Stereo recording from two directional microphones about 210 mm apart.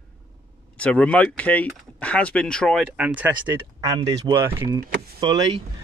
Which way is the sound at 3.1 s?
10° right (ahead or behind).